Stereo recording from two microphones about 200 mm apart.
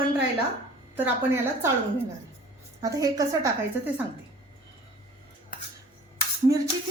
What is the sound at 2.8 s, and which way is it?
Speech, 15° right (ahead or behind).